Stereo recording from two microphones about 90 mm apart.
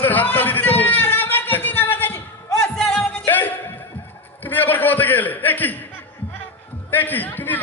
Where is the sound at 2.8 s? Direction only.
5° left (ahead or behind).